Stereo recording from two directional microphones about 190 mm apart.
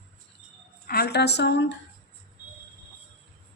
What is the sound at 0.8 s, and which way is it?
Speech, 55° left (ahead or behind).